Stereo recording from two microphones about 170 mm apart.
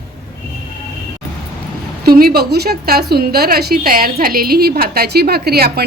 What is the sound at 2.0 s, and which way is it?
A woman's voice, 60° right (ahead or behind).